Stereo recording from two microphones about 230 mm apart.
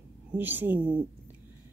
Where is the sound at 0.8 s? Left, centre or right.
Right.